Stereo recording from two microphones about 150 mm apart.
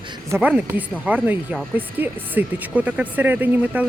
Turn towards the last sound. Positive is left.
turn(degrees=-10)  # may be behind; listen again after turning